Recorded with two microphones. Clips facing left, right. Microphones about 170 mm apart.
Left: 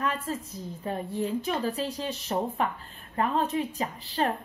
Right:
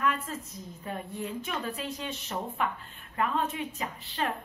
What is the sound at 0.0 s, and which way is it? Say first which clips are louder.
A woman's voice: left 1 dB; 30° left (ahead or behind).